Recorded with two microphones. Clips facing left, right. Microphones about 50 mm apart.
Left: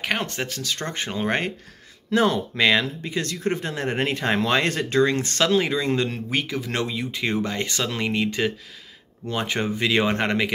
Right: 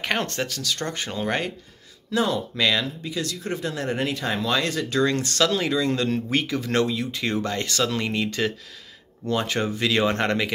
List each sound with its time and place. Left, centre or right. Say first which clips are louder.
0.0 s speech: right 1 dB; centre
0.5 s speech: right 1 dB; left
2.0 s speech: left 3 dB; left
5.0 s speech: right 2 dB; left
6.3 s speech: right 3 dB; centre